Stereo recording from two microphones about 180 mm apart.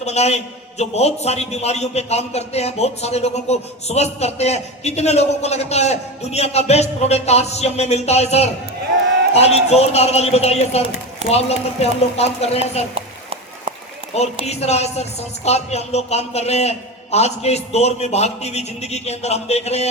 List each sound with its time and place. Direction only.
0.0 s a man's voice: 35° left (ahead or behind)
12.9 s a sound: 30° right (ahead or behind)
14.4 s a man's voice: 35° left (ahead or behind)